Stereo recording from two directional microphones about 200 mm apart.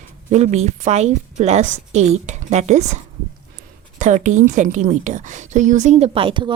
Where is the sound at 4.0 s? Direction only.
40° right (ahead or behind).